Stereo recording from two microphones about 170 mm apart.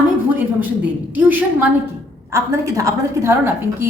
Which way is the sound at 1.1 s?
10° right (ahead or behind).